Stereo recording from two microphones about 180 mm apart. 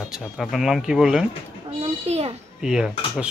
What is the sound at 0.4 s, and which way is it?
Speech, centre (ahead or behind).